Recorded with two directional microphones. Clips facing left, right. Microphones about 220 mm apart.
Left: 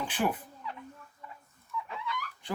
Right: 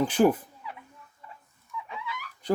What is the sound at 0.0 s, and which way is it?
Speech, 40° right (ahead or behind).